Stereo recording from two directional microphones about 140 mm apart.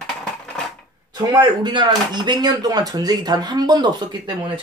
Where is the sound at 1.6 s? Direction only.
35° right (ahead or behind).